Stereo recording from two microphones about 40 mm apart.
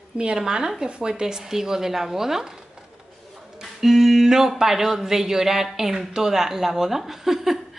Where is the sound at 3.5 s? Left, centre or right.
Centre.